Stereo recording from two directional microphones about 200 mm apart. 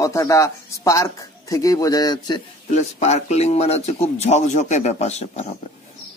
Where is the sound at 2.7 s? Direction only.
35° left (ahead or behind).